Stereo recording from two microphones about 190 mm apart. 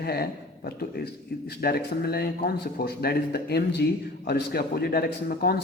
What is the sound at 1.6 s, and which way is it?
A man's voice, 55° left (ahead or behind).